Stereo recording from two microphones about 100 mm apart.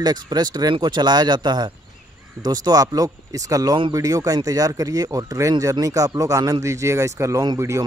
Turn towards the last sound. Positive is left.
turn(degrees=-30)  # may be behind; listen again after turning